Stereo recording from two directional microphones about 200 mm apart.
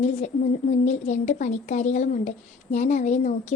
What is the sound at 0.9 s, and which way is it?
A woman's voice, 35° left (ahead or behind).